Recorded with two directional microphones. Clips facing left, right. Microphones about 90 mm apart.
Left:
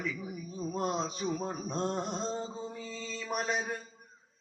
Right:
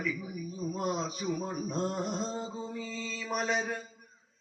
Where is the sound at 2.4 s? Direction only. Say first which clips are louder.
Right 1 dB; 10° right (ahead or behind).